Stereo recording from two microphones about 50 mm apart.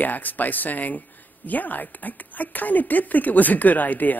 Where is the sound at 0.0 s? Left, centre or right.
Left.